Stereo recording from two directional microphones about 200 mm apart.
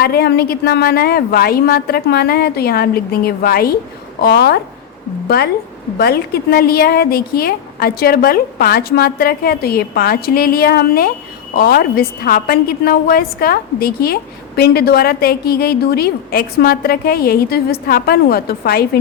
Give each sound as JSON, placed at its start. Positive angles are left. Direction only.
{"t": 0.0, "sound": "a woman's voice", "side_deg": 50}
{"t": 6.0, "sound": "a woman's voice", "side_deg": 50}